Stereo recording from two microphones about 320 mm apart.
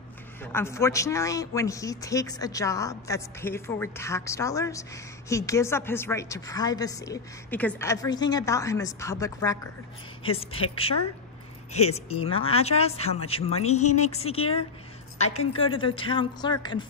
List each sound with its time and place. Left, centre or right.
0.4 s a man's voice: centre
11.7 s a man's voice: centre